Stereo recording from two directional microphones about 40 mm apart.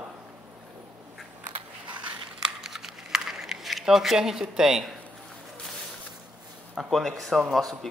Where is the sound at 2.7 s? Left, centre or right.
Centre.